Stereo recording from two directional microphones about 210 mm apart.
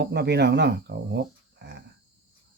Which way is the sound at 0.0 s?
55° right (ahead or behind).